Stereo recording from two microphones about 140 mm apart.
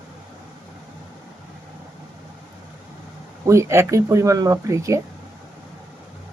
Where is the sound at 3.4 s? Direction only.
20° right (ahead or behind).